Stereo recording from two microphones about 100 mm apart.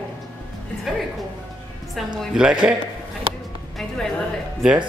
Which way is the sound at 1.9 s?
5° right (ahead or behind).